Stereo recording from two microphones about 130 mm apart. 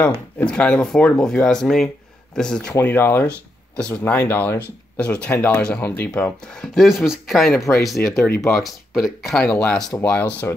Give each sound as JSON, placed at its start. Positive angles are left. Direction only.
{"t": 0.4, "sound": "speech", "side_deg": 10}
{"t": 2.7, "sound": "speech", "side_deg": 15}